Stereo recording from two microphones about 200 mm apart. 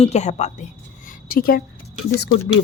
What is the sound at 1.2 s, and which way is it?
Speech, 45° left (ahead or behind).